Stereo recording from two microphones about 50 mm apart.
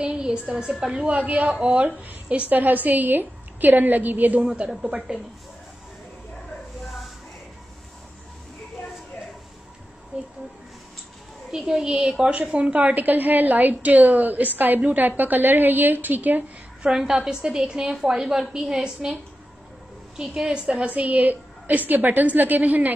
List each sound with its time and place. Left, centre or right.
0.0 s a sound: centre
0.6 s a woman's voice: centre
1.0 s a woman's voice: right
4.8 s speech: centre
11.5 s a woman's voice: centre; by 16.4 s right
16.8 s a woman's voice: centre
20.2 s a woman's voice: centre
20.9 s a woman's voice: right